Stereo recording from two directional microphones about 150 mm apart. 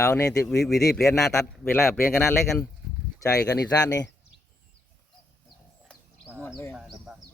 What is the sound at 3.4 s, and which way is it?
Speech, 20° left (ahead or behind).